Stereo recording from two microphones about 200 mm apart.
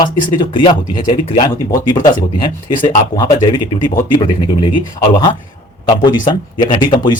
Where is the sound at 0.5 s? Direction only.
20° left (ahead or behind).